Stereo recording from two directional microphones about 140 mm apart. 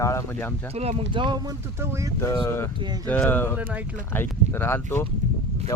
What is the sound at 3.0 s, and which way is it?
Speech, 15° left (ahead or behind).